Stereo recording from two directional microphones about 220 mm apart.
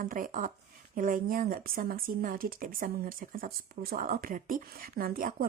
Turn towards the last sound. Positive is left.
turn(degrees=-40)  # may be behind; listen again after turning